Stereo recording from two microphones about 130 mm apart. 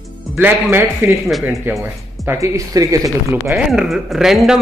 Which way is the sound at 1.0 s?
15° right (ahead or behind).